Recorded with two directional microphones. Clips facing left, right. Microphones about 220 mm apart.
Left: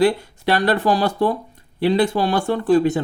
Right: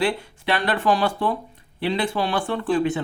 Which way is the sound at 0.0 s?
40° left (ahead or behind).